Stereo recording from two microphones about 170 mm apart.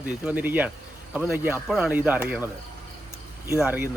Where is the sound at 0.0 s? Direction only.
10° right (ahead or behind).